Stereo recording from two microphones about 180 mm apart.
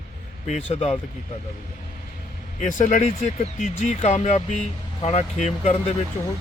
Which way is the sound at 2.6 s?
45° left (ahead or behind).